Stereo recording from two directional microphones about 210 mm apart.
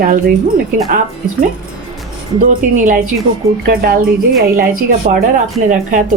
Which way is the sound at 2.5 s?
40° right (ahead or behind).